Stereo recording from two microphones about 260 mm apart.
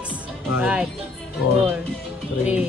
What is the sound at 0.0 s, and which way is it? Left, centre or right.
Music, centre.